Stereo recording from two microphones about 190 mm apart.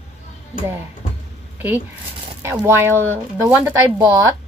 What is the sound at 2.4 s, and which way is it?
Speech, 15° right (ahead or behind).